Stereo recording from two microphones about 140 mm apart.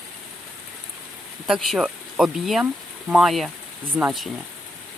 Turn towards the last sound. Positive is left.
turn(degrees=-15)  # may be behind; listen again after turning